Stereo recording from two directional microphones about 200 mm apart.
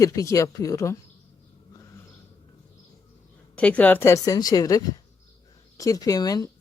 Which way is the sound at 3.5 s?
5° left (ahead or behind).